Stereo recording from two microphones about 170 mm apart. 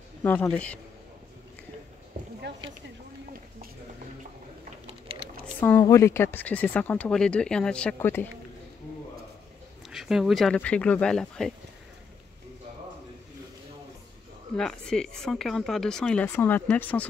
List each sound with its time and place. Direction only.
0.2 s speech: 10° left (ahead or behind)
2.1 s a sound: 60° right (ahead or behind)
5.1 s typing: 30° right (ahead or behind)
5.6 s speech: 15° left (ahead or behind)
9.8 s speech: centre (ahead or behind)
14.6 s speech: 5° left (ahead or behind)